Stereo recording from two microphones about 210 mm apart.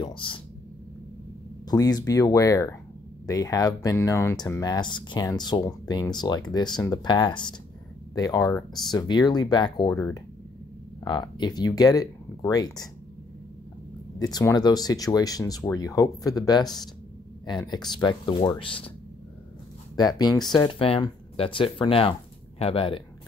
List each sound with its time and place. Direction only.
0.0 s speech: 25° left (ahead or behind)
1.7 s speech: 20° left (ahead or behind)
9.9 s speech: 10° left (ahead or behind)
11.1 s speech: 20° left (ahead or behind)
14.1 s speech: 15° left (ahead or behind)
20.0 s speech: 20° left (ahead or behind)